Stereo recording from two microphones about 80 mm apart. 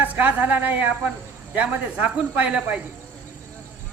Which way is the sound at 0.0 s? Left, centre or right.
Right.